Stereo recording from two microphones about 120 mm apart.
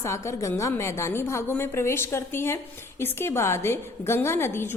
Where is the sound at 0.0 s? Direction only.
25° left (ahead or behind).